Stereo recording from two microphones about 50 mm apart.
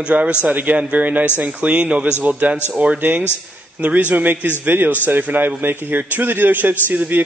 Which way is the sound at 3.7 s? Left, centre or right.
Right.